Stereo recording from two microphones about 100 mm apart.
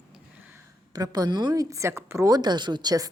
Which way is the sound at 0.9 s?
40° right (ahead or behind).